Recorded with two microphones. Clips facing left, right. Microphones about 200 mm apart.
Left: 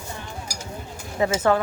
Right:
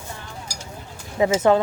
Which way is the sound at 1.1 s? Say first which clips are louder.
Right 3 dB; 15° right (ahead or behind).